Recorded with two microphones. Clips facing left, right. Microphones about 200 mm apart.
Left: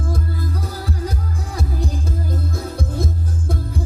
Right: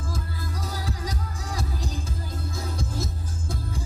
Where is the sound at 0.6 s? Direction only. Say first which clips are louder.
Left 6 dB; 60° left (ahead or behind).